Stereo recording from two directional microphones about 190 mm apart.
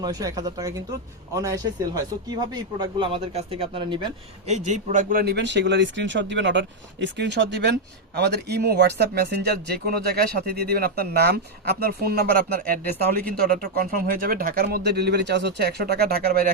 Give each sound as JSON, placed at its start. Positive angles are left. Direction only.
{"t": 0.0, "sound": "a man's voice", "side_deg": -20}